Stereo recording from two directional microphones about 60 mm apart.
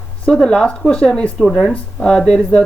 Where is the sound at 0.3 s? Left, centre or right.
Centre.